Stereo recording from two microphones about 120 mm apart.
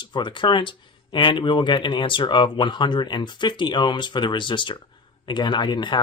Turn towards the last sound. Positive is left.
turn(degrees=40)  # may be behind; listen again after turning